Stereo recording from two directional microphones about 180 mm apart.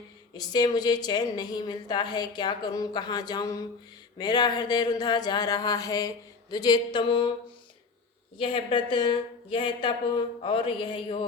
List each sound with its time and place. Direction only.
0.3 s a woman's voice: 20° left (ahead or behind)
8.4 s a woman's voice: 30° left (ahead or behind)